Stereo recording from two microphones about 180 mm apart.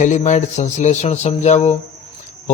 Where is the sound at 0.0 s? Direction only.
40° left (ahead or behind).